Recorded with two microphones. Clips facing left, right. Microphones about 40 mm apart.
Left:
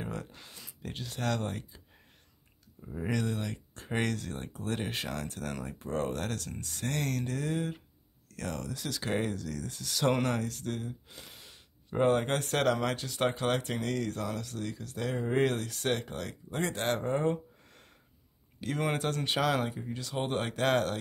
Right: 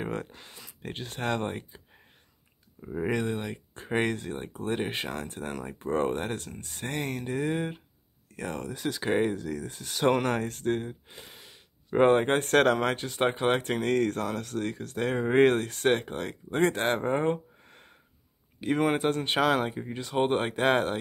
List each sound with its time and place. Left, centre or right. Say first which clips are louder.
0.0 s a sound: right 5 dB; right
0.4 s speech: right 2 dB; right
2.9 s speech: right 4 dB; right
10.3 s speech: right 6 dB; right
11.9 s speech: right 6 dB; right
13.6 s speech: right 7 dB; right